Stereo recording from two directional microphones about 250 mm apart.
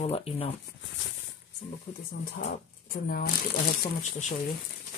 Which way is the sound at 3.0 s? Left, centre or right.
Left.